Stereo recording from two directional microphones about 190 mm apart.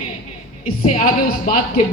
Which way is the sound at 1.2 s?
50° left (ahead or behind).